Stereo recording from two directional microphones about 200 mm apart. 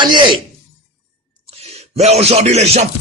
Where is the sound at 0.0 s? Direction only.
20° right (ahead or behind).